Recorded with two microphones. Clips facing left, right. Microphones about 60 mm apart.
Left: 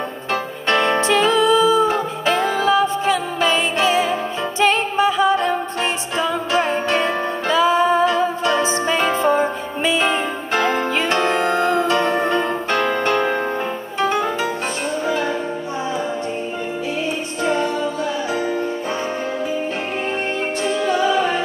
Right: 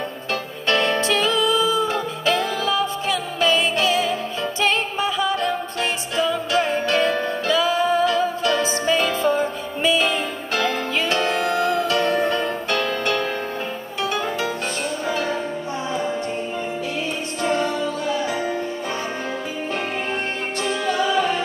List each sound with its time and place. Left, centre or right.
0.3 s music: left
17.4 s music: left
20.6 s music: left